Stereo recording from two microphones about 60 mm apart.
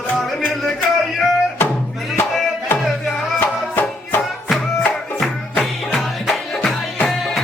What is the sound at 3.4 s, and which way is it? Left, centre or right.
Music, left.